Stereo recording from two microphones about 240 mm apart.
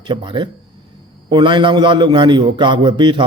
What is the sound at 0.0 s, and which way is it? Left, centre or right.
A man's voice, centre.